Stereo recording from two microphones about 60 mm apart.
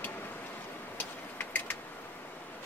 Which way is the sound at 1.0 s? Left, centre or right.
Left.